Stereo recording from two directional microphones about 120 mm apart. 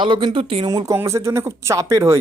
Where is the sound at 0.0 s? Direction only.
45° right (ahead or behind).